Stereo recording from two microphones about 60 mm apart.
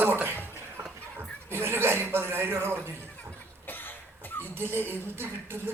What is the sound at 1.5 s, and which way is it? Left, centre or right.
Chuckle, right.